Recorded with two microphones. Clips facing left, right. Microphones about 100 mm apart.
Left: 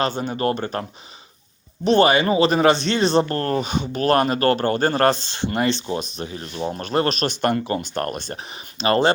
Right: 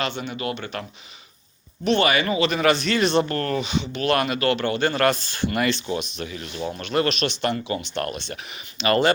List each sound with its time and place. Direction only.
0.0 s speech: 40° left (ahead or behind)